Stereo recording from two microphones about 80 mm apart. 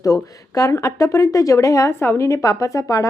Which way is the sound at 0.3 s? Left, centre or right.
Left.